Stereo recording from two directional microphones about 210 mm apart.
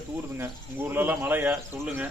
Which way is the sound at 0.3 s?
10° right (ahead or behind).